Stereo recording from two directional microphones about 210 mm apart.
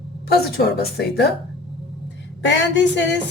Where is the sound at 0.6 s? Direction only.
50° left (ahead or behind).